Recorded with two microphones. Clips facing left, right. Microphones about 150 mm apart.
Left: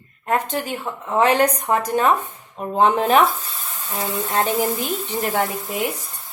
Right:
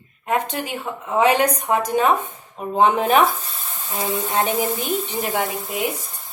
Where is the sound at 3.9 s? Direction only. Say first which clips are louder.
Right 1 dB; 20° right (ahead or behind).